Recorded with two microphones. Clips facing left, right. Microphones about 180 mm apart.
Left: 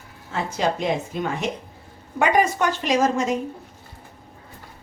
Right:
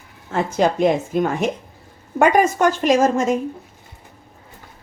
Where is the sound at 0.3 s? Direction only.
50° right (ahead or behind).